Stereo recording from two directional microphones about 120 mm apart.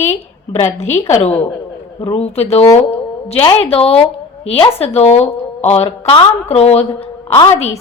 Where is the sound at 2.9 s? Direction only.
55° left (ahead or behind).